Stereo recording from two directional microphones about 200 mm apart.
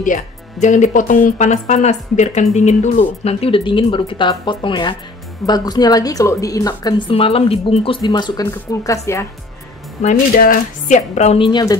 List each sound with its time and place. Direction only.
0.0 s a woman's voice: 40° left (ahead or behind); by 9.2 s 15° left (ahead or behind)
10.0 s speech: 45° left (ahead or behind); by 11.7 s 25° left (ahead or behind)